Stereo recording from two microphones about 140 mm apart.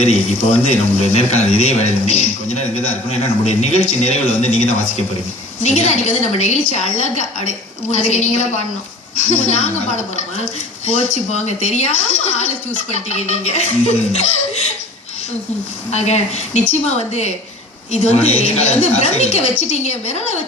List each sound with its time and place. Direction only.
0.0 s a woman's voice: 50° left (ahead or behind)
12.9 s a woman's voice: 50° left (ahead or behind)
15.9 s a woman's voice: 50° left (ahead or behind)